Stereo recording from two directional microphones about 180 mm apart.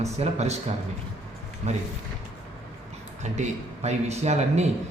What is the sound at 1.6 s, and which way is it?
Speech, 35° right (ahead or behind).